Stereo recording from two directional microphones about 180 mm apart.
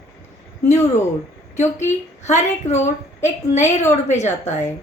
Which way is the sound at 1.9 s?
40° left (ahead or behind).